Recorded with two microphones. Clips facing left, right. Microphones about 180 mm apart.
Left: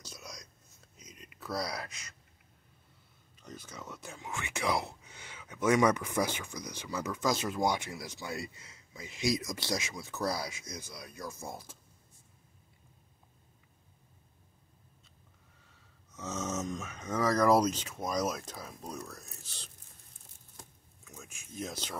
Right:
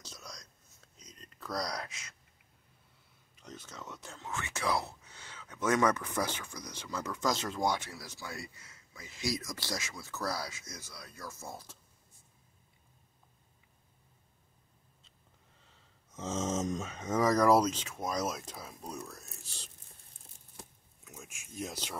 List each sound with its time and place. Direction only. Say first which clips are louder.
0.0 s whispering: left 1 dB; 15° left (ahead or behind)
0.9 s a sound: left 2 dB; 10° left (ahead or behind)
3.4 s speech: left 1 dB; 10° left (ahead or behind)
16.2 s speech: right 3 dB; 30° right (ahead or behind)
17.4 s speech: left 2 dB; centre (ahead or behind)
21.0 s a sound: even; 5° right (ahead or behind)